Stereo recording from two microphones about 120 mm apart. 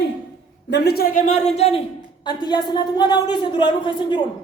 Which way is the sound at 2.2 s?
35° left (ahead or behind).